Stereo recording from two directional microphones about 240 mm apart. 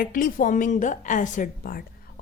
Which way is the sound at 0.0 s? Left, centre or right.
Left.